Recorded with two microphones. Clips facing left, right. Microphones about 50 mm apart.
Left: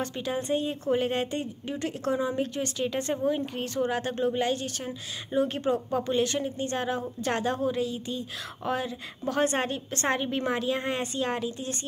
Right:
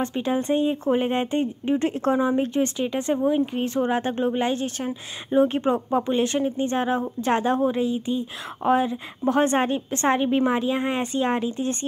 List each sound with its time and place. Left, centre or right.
0.0 s speech: right